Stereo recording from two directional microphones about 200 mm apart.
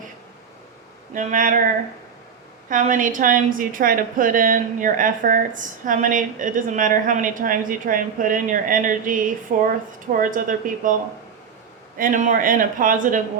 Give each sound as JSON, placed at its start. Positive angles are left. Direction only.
{"t": 1.1, "sound": "a woman's voice", "side_deg": -40}
{"t": 11.9, "sound": "a woman's voice", "side_deg": -40}